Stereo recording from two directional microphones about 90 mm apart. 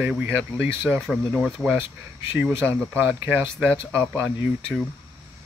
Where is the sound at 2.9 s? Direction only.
20° right (ahead or behind).